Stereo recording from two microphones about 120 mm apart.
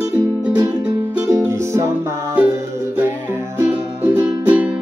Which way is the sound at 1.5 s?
25° right (ahead or behind).